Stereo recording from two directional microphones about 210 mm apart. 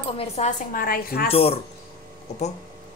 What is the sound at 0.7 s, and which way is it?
Speech, 45° left (ahead or behind).